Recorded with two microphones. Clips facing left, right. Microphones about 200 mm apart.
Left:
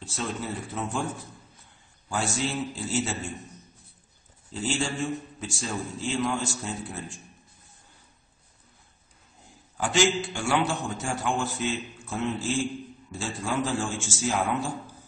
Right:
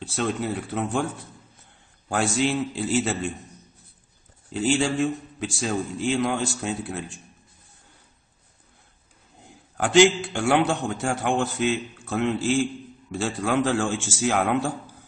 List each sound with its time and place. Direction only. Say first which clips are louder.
0.0 s a man's voice: right 6 dB; 65° right (ahead or behind)
2.0 s a man's voice: right 6 dB; 60° right (ahead or behind)
4.7 s a man's voice: right 6 dB; 65° right (ahead or behind)
9.4 s a man's voice: right 4 dB; 60° right (ahead or behind)